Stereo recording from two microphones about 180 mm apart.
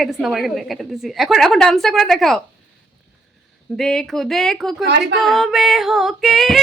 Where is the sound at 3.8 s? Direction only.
Centre (ahead or behind).